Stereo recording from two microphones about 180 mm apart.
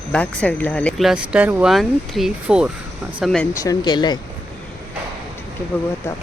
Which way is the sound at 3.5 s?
20° left (ahead or behind).